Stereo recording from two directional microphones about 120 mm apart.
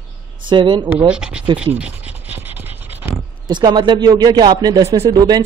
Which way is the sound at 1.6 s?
10° right (ahead or behind).